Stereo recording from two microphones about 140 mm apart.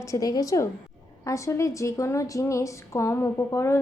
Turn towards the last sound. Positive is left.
turn(degrees=20)  # may be behind; listen again after turning